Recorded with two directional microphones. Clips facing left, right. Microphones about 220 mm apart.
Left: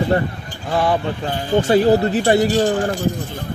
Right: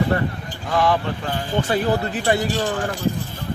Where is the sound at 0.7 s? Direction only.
30° left (ahead or behind).